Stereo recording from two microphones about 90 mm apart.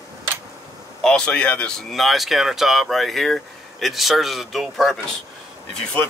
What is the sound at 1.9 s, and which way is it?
Speech, centre (ahead or behind).